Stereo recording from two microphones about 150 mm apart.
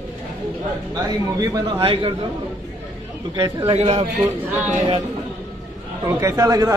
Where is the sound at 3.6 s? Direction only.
40° right (ahead or behind).